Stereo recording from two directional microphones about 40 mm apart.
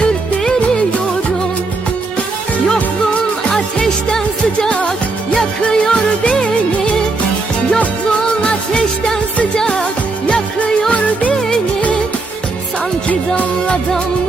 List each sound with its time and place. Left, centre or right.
3.5 s music: centre
5.6 s music: left
8.4 s music: left
13.1 s music: left